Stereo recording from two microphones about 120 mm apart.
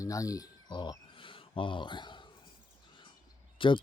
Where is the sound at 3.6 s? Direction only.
45° left (ahead or behind).